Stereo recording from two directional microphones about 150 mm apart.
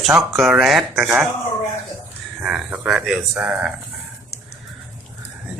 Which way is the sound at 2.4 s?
5° right (ahead or behind).